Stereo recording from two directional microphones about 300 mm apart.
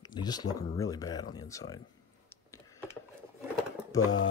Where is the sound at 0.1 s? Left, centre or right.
Centre.